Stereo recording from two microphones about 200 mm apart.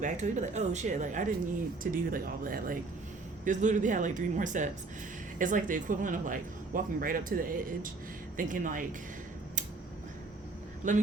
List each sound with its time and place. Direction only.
0.0 s speech: 35° right (ahead or behind)
10.8 s speech: 40° right (ahead or behind)